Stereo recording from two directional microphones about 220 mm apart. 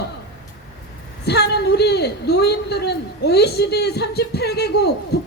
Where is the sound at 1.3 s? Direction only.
50° left (ahead or behind).